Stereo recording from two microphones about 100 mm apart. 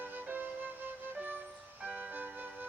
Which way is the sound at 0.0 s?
20° right (ahead or behind).